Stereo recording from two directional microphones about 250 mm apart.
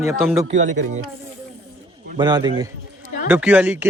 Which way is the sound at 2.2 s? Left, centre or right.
Centre.